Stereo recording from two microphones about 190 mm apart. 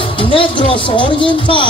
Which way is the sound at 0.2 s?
25° left (ahead or behind).